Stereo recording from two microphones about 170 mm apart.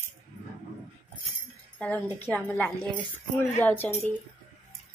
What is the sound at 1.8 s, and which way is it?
A woman's voice, 10° left (ahead or behind).